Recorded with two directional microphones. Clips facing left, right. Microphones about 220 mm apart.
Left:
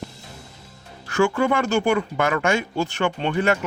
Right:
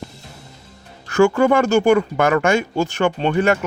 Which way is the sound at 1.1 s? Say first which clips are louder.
Right 6 dB; 45° right (ahead or behind).